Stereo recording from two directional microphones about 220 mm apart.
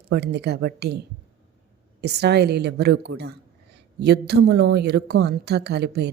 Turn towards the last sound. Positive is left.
turn(degrees=-50)  # may be behind; listen again after turning